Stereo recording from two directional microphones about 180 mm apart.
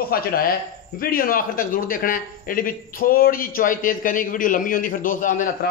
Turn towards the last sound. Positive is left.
turn(degrees=45)  # may be behind; listen again after turning